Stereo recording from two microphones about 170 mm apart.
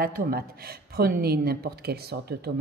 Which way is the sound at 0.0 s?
60° right (ahead or behind).